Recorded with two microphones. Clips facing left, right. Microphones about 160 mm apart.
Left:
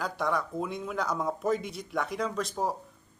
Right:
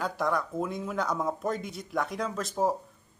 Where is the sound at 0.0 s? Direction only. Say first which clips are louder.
Right 1 dB; centre (ahead or behind).